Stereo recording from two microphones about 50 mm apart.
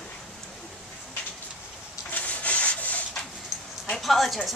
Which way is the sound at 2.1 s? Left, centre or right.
Left.